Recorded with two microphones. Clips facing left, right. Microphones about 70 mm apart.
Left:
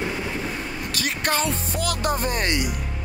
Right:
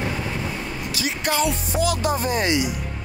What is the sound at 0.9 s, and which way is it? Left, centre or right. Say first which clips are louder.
Music: right 1 dB; left.